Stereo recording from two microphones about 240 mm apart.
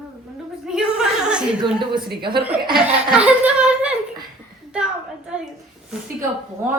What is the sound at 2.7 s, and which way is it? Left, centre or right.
Speech, centre.